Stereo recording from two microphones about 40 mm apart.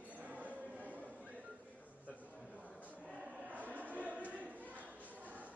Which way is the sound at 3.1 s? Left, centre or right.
Right.